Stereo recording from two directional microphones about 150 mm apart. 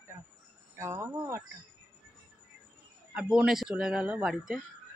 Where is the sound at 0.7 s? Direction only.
20° right (ahead or behind).